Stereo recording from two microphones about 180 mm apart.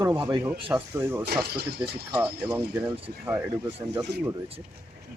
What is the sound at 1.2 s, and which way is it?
Speech, 60° right (ahead or behind).